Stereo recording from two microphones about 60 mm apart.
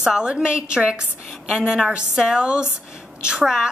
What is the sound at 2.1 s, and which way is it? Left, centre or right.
Speech, centre.